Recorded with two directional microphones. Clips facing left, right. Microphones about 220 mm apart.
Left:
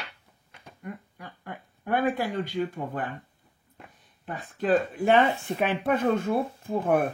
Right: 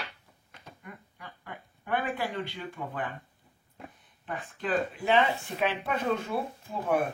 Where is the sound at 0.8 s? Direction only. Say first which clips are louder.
Left 9 dB; 45° left (ahead or behind).